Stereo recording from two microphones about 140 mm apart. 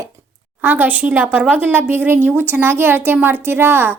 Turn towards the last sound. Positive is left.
turn(degrees=-15)  # may be behind; listen again after turning